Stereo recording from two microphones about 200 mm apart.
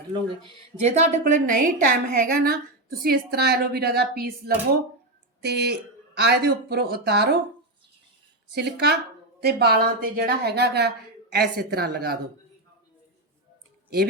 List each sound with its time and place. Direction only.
0.8 s a woman's voice: 35° right (ahead or behind); by 7.3 s 55° right (ahead or behind)
8.5 s a woman's voice: 55° right (ahead or behind)